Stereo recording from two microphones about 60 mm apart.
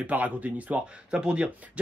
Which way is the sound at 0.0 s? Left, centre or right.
Right.